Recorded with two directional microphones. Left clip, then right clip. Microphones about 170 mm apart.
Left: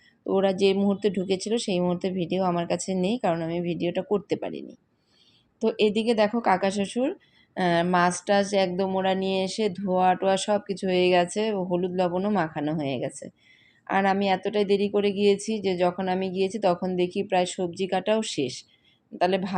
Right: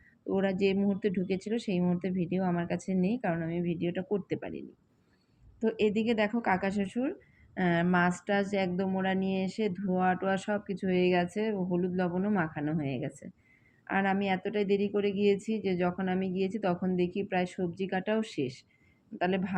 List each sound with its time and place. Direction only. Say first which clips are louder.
0.3 s speech: left 7 dB; 35° left (ahead or behind)